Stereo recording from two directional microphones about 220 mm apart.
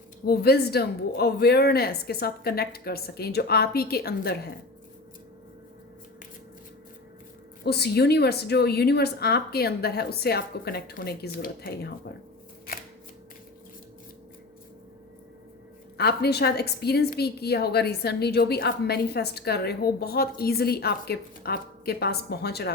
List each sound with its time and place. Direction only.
0.3 s a woman's voice: 45° left (ahead or behind)
7.6 s a woman's voice: 45° left (ahead or behind)
16.0 s a woman's voice: 45° left (ahead or behind)